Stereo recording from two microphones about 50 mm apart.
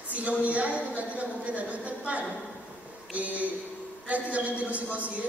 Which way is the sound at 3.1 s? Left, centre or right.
Right.